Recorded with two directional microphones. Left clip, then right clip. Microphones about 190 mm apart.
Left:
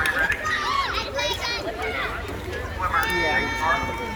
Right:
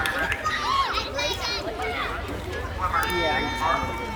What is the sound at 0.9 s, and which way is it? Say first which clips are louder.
Run: left 1 dB; 60° right (ahead or behind).